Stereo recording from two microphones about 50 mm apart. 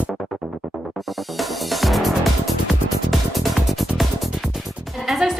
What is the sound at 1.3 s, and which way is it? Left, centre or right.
Music, centre.